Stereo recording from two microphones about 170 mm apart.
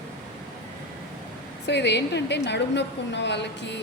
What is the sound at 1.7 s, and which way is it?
A woman's voice, 90° left.